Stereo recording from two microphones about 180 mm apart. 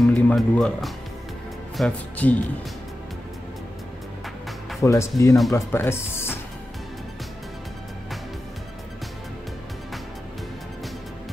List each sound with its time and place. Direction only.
0.0 s speech: 5° left (ahead or behind)
4.8 s speech: 15° left (ahead or behind)